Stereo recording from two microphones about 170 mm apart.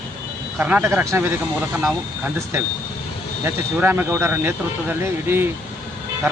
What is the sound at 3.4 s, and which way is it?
Speech, 10° right (ahead or behind).